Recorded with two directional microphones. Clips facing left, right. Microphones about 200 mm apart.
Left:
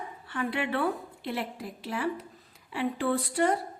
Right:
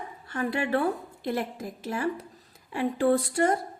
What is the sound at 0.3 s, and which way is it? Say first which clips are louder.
A woman's voice: right 3 dB; 45° right (ahead or behind).